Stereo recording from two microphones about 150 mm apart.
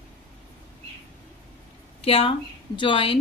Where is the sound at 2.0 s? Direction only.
40° left (ahead or behind).